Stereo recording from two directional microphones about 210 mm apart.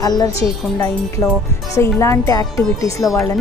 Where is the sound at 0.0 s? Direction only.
15° left (ahead or behind).